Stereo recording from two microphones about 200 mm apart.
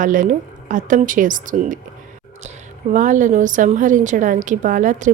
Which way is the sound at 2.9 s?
40° right (ahead or behind).